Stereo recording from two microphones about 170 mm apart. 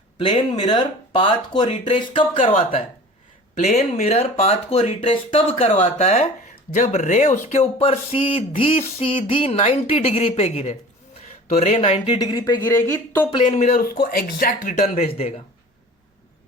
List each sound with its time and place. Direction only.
0.2 s speech: 25° left (ahead or behind)
3.5 s speech: 40° left (ahead or behind)
12.6 s speech: 15° left (ahead or behind)
13.3 s speech: 35° left (ahead or behind)
13.6 s speech: 50° left (ahead or behind)
15.1 s speech: 35° left (ahead or behind)